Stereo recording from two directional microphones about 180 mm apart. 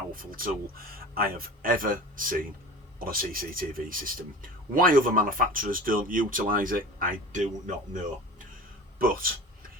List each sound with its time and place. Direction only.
0.1 s speech: 50° right (ahead or behind)
9.0 s speech: 55° right (ahead or behind)